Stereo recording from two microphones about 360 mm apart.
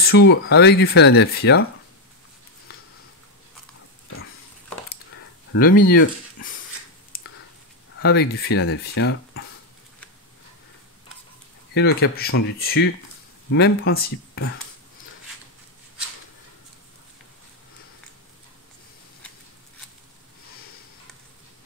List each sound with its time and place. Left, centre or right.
0.0 s speech: left
2.7 s a sound: left
5.5 s speech: left
7.1 s a sound: left
8.0 s speech: left
11.7 s speech: left